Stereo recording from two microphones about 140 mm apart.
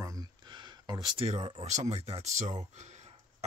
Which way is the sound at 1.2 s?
45° right (ahead or behind).